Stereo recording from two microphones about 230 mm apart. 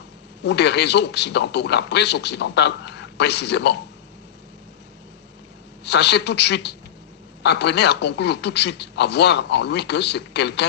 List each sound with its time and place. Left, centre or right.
0.4 s a man's voice: left
5.8 s a man's voice: left